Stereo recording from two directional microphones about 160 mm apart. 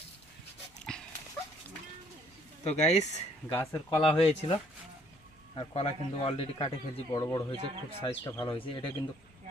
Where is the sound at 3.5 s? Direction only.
15° left (ahead or behind).